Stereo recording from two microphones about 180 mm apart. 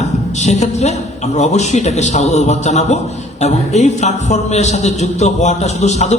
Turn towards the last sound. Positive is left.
turn(degrees=40)  # may be behind; listen again after turning